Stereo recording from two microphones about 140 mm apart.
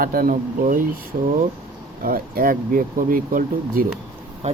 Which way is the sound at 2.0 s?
90° right.